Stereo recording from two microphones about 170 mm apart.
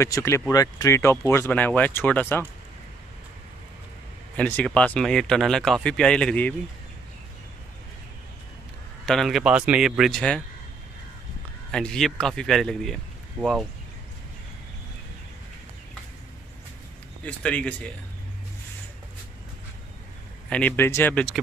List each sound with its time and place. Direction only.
0.0 s speech: 15° left (ahead or behind)
4.4 s speech: 5° left (ahead or behind)
9.0 s speech: centre (ahead or behind)
11.7 s speech: 5° left (ahead or behind)
17.2 s speech: 5° left (ahead or behind)
20.4 s speech: 10° left (ahead or behind)